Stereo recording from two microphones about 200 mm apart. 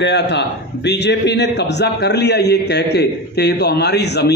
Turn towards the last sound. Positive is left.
turn(degrees=55)  # may be behind; listen again after turning